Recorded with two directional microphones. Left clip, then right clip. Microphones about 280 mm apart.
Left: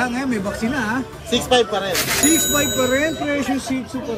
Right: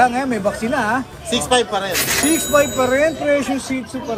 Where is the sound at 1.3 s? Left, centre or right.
Centre.